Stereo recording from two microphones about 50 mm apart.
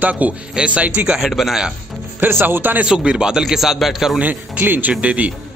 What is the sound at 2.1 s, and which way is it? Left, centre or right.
Speech, right.